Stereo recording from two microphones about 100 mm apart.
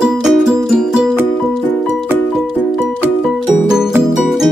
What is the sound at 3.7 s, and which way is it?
Music, 5° right (ahead or behind).